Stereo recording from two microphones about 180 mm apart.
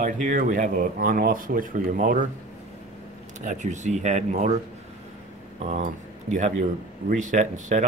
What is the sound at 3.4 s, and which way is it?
Speech, 40° right (ahead or behind).